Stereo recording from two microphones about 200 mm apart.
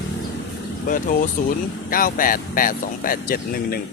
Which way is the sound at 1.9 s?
45° left (ahead or behind).